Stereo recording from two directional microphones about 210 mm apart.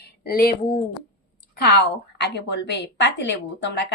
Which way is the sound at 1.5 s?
50° left (ahead or behind).